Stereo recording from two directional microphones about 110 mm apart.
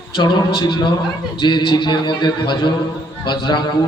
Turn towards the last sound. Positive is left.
turn(degrees=45)  # may be behind; listen again after turning